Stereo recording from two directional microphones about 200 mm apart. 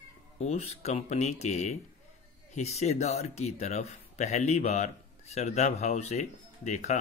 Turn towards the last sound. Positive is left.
turn(degrees=35)  # may be behind; listen again after turning